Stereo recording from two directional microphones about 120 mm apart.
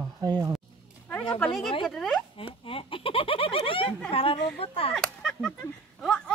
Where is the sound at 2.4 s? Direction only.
50° left (ahead or behind).